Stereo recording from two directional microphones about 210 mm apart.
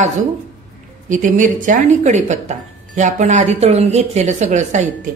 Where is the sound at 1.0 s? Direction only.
35° right (ahead or behind).